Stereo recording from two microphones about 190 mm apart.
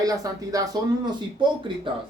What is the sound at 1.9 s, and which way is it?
Speech, 25° right (ahead or behind).